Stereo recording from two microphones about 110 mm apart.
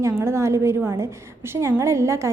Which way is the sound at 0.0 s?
25° right (ahead or behind).